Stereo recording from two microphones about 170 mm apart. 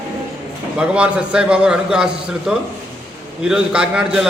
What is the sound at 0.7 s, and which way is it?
A man's voice, 5° right (ahead or behind).